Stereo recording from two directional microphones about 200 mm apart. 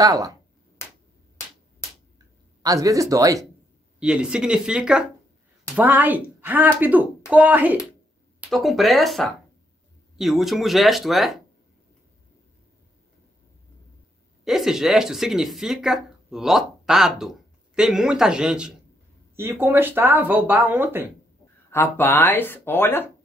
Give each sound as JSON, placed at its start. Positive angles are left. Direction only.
{"t": 0.0, "sound": "speech", "side_deg": -15}
{"t": 2.6, "sound": "speech", "side_deg": -15}
{"t": 4.0, "sound": "speech", "side_deg": -5}
{"t": 14.4, "sound": "speech", "side_deg": 0}
{"t": 21.6, "sound": "speech", "side_deg": 10}